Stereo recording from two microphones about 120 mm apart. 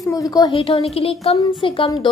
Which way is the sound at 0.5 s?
55° left (ahead or behind).